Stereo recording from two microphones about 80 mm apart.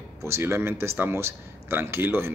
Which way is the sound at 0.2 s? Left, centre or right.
Right.